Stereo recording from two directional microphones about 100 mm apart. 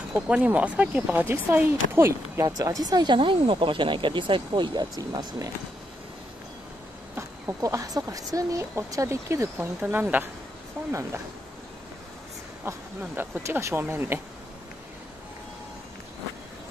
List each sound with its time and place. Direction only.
0.1 s speech: 15° right (ahead or behind)
2.4 s speech: 35° right (ahead or behind)
3.2 s speech: 60° right (ahead or behind)
4.9 s speech: 40° right (ahead or behind)
7.2 s speech: 35° right (ahead or behind)
9.8 s speech: 15° right (ahead or behind)
10.9 s speech: 30° right (ahead or behind)
12.7 s speech: 30° right (ahead or behind)